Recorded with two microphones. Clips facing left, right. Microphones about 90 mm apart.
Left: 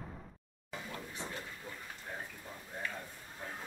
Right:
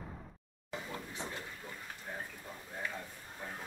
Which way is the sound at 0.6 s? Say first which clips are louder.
Right 2 dB; 20° right (ahead or behind).